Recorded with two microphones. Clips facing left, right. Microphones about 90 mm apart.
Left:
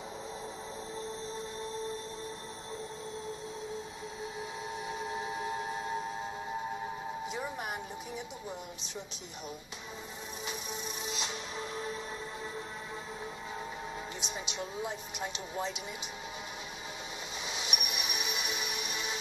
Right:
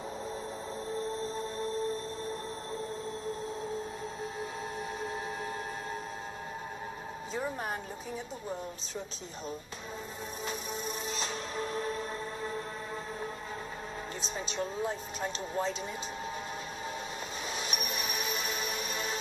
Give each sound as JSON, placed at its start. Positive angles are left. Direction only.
{"t": 11.1, "sound": "music", "side_deg": -40}
{"t": 14.2, "sound": "speech", "side_deg": -40}
{"t": 17.5, "sound": "music", "side_deg": -40}